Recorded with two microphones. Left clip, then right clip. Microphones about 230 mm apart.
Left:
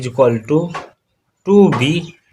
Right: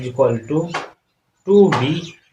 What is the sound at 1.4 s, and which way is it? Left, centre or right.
Speech, left.